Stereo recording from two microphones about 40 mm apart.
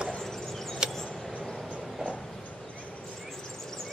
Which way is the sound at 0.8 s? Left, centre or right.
Centre.